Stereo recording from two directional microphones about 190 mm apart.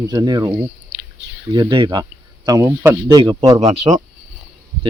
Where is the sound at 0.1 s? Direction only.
20° right (ahead or behind).